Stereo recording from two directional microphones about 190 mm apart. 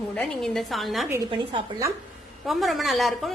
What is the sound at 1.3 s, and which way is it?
Speech, 20° right (ahead or behind).